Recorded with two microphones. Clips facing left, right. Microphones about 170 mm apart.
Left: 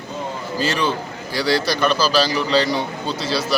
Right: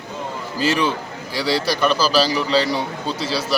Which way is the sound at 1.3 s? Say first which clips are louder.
Left 1 dB; 5° right (ahead or behind).